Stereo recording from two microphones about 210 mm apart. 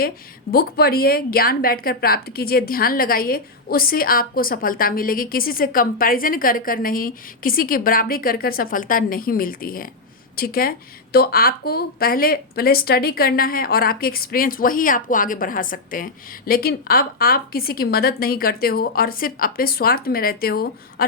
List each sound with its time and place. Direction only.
0.5 s speech: 45° left (ahead or behind)